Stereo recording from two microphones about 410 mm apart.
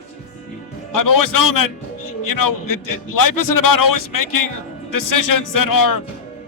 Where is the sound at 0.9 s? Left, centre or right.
Left.